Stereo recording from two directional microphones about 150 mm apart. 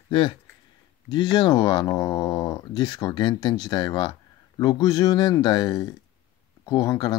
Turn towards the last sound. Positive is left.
turn(degrees=25)  # may be behind; listen again after turning